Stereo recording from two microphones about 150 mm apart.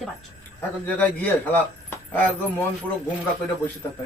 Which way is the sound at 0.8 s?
10° left (ahead or behind).